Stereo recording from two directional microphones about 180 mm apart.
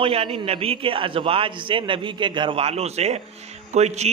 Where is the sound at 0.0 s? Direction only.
35° right (ahead or behind).